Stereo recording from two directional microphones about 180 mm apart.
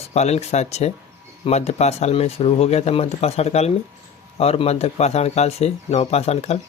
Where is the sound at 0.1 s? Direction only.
35° left (ahead or behind).